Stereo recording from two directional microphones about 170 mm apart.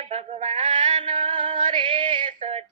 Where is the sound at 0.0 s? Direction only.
35° right (ahead or behind).